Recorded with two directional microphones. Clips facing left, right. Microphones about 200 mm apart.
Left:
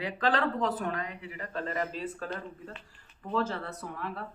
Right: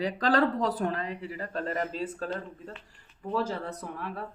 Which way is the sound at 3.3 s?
15° right (ahead or behind).